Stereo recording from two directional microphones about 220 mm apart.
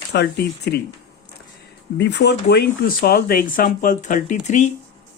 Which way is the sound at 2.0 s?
50° left (ahead or behind).